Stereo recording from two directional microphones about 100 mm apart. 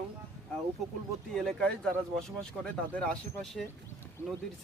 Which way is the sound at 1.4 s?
5° left (ahead or behind).